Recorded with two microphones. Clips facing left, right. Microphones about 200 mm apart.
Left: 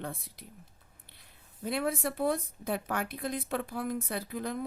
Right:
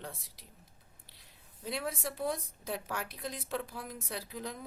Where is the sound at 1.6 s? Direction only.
55° left (ahead or behind).